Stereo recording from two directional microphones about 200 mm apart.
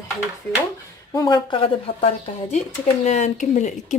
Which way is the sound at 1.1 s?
20° left (ahead or behind).